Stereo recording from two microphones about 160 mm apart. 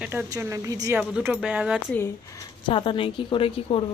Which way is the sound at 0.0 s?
10° right (ahead or behind).